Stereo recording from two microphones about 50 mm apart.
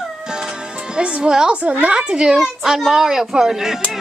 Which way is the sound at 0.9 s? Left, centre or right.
Right.